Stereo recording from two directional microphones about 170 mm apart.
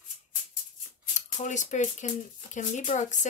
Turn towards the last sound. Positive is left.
turn(degrees=45)  # may be behind; listen again after turning